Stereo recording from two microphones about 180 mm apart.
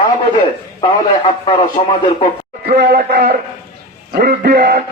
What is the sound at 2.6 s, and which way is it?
A man's voice, 65° right (ahead or behind).